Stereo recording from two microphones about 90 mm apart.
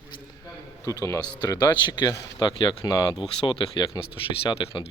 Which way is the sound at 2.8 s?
45° left (ahead or behind).